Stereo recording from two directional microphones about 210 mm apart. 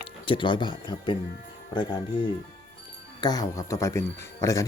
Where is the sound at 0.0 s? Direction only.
25° left (ahead or behind).